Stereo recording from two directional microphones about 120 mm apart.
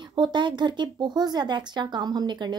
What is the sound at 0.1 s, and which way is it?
Speech, 40° right (ahead or behind).